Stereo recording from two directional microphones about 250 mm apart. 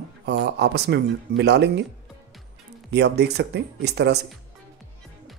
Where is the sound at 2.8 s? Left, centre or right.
Right.